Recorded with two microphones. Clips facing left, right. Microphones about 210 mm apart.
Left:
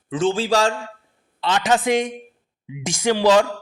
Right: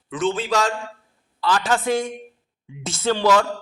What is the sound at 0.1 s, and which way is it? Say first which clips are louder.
Speech: left 3 dB; 30° left (ahead or behind).